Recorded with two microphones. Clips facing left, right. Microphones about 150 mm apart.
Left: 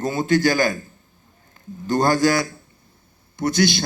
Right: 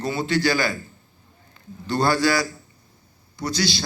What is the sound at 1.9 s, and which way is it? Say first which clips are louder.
A man's voice: left 3 dB; 45° left (ahead or behind).